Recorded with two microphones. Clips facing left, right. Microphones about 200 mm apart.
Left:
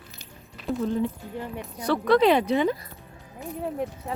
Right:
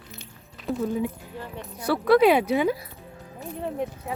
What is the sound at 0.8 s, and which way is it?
Speech, 10° right (ahead or behind).